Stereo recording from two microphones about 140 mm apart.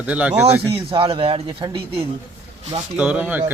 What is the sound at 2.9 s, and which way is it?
Speech, 10° right (ahead or behind).